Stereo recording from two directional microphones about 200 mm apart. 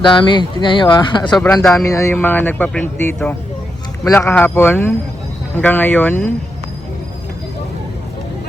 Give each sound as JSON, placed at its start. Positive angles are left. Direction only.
{"t": 0.0, "sound": "a man's voice", "side_deg": 25}